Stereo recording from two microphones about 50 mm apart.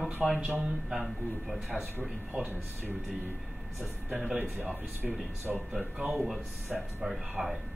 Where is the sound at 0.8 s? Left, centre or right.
Centre.